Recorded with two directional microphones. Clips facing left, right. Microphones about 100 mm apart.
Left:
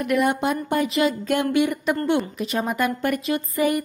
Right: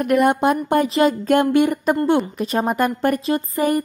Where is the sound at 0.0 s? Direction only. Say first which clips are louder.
Right 5 dB; 45° right (ahead or behind).